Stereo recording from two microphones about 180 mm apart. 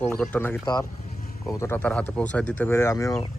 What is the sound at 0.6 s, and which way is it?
Speech, 20° left (ahead or behind).